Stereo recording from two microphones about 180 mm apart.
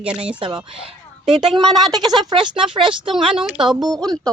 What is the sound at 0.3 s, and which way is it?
Speech, 25° right (ahead or behind).